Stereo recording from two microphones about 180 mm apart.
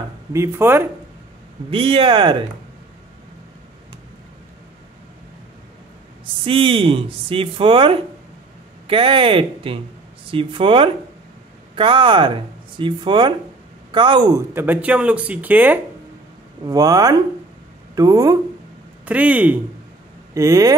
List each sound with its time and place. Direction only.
0.3 s speech: 15° right (ahead or behind)
1.7 s speech: 30° right (ahead or behind)
6.4 s speech: 30° right (ahead or behind)
14.5 s speech: 10° right (ahead or behind)
19.0 s speech: 10° right (ahead or behind)